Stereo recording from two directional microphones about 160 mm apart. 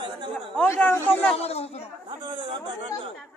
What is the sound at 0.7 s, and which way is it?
Speech, 15° left (ahead or behind).